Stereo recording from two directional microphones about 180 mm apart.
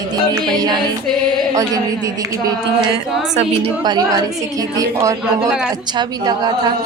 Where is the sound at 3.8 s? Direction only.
25° right (ahead or behind).